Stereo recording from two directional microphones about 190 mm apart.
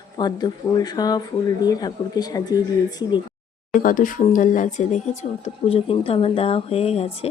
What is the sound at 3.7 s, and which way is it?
Speech, 45° left (ahead or behind).